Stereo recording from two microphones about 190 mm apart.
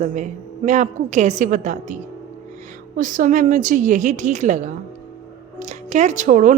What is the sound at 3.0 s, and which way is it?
A woman's voice, 45° right (ahead or behind).